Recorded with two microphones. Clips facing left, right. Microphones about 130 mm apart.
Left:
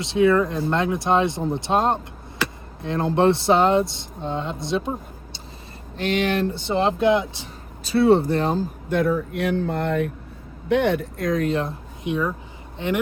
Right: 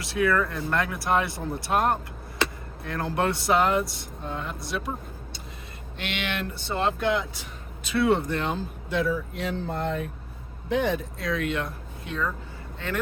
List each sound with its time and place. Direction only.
0.0 s speech: 25° left (ahead or behind)
6.0 s speech: 40° left (ahead or behind)
6.5 s speech: 25° left (ahead or behind)
8.9 s speech: 55° left (ahead or behind)
11.3 s speech: 40° left (ahead or behind)
12.0 s speech: 15° left (ahead or behind)